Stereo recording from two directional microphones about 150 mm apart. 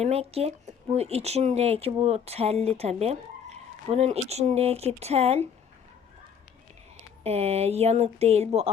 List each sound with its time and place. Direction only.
0.0 s speech: 45° right (ahead or behind)
7.3 s speech: 45° right (ahead or behind)